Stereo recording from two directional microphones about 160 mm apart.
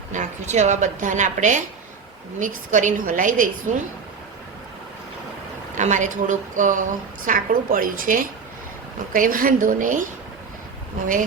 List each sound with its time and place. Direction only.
0.1 s a woman's voice: 50° right (ahead or behind)
5.7 s a woman's voice: 50° right (ahead or behind)